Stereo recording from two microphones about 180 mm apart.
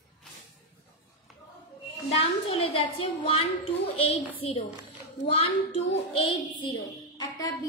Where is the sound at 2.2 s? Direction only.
30° left (ahead or behind).